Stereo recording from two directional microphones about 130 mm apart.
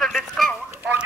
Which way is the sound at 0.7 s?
15° right (ahead or behind).